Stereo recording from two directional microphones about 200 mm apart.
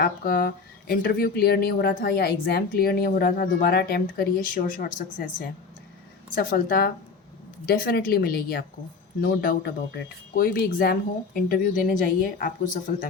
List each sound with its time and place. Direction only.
0.0 s speech: 45° left (ahead or behind)